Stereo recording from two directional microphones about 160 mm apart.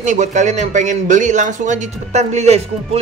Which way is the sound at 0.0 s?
50° right (ahead or behind).